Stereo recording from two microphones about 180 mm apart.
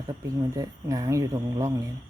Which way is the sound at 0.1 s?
15° right (ahead or behind).